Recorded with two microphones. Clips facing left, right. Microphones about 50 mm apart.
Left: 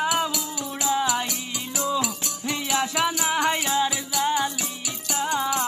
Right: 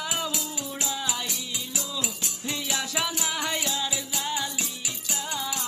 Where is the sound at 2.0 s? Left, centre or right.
Left.